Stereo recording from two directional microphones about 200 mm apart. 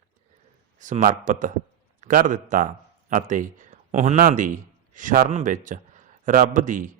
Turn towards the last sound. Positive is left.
turn(degrees=-40)  # may be behind; listen again after turning